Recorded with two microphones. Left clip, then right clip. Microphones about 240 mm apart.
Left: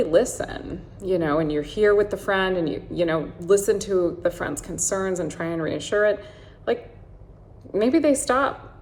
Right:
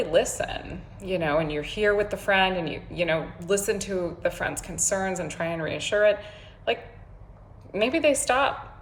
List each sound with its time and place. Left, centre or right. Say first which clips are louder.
0.0 s a woman's voice: left 3 dB; centre
7.8 s a woman's voice: left 3 dB; centre